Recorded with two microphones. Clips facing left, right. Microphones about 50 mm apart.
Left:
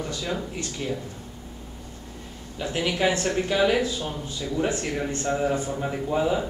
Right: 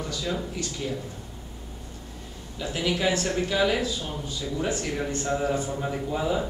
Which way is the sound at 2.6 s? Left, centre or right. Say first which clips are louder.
Left 2 dB; left.